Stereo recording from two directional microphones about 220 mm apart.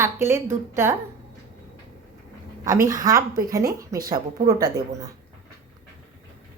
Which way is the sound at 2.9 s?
15° right (ahead or behind).